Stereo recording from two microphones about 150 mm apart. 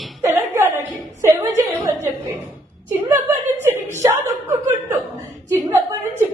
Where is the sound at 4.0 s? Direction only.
15° right (ahead or behind).